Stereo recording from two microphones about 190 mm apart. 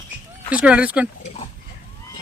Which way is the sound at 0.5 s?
5° right (ahead or behind).